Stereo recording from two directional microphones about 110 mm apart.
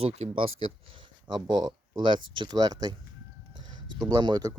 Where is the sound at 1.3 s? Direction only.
40° right (ahead or behind).